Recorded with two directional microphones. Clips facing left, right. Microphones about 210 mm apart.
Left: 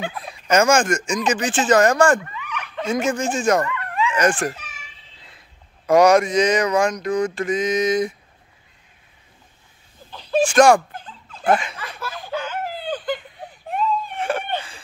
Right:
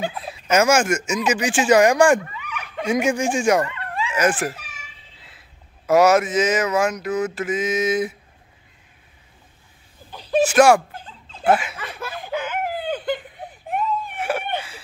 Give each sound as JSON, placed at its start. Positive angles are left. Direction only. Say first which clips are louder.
{"t": 0.3, "sound": "speech", "louder": "left 1 dB", "side_deg": -5}
{"t": 3.6, "sound": "dog", "louder": "left 4 dB", "side_deg": -30}
{"t": 4.1, "sound": "speech", "louder": "even", "side_deg": -5}
{"t": 5.9, "sound": "mantra", "louder": "left 1 dB", "side_deg": -5}
{"t": 10.1, "sound": "speech", "louder": "even", "side_deg": -10}
{"t": 11.8, "sound": "a sound", "louder": "right 1 dB", "side_deg": -15}